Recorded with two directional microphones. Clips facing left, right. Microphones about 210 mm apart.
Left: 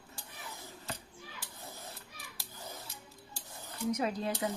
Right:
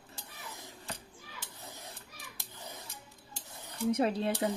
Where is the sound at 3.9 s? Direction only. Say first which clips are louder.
Right 4 dB; 30° right (ahead or behind).